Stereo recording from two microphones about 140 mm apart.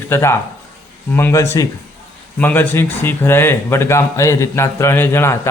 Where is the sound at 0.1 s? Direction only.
20° left (ahead or behind).